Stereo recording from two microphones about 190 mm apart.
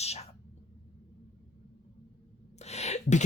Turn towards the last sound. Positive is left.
turn(degrees=35)  # may be behind; listen again after turning